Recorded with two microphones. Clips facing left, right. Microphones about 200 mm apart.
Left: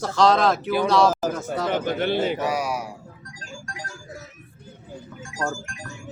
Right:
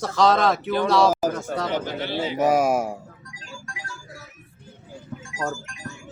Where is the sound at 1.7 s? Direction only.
55° left (ahead or behind).